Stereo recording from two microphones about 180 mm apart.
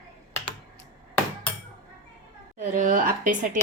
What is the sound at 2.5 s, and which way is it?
Speech, 45° right (ahead or behind).